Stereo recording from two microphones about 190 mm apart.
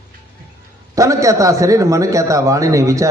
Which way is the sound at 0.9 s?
15° right (ahead or behind).